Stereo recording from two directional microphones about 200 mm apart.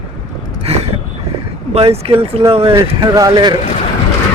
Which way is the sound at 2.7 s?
20° right (ahead or behind).